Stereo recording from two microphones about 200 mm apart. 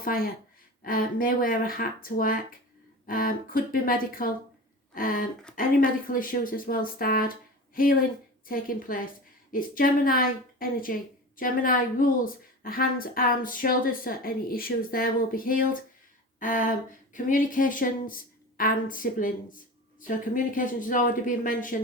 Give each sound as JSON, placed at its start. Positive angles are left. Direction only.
{"t": 0.0, "sound": "a woman's voice", "side_deg": 45}
{"t": 8.4, "sound": "a woman's voice", "side_deg": 45}
{"t": 16.4, "sound": "a sound", "side_deg": 40}
{"t": 17.2, "sound": "a woman's voice", "side_deg": 40}